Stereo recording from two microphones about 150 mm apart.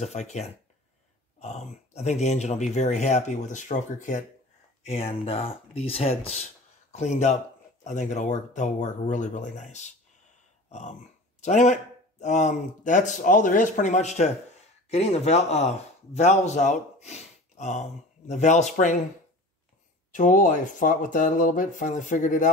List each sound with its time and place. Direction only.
0.0 s speech: 50° left (ahead or behind)
4.8 s a man's voice: 40° left (ahead or behind)
20.1 s speech: 60° left (ahead or behind)